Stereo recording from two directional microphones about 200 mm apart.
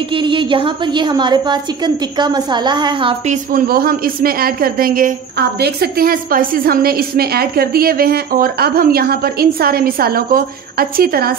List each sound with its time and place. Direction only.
0.1 s a woman's voice: 25° right (ahead or behind)
3.5 s a woman's voice: 50° right (ahead or behind)